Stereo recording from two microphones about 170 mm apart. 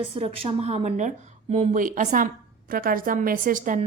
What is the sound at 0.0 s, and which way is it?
Speech, 35° right (ahead or behind).